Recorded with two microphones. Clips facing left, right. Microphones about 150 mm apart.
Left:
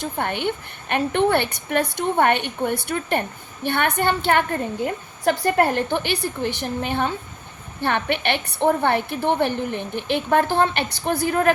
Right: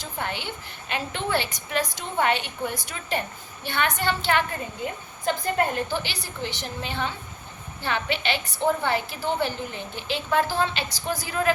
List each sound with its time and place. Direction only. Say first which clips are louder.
0.0 s a woman's voice: left 8 dB; 55° left (ahead or behind)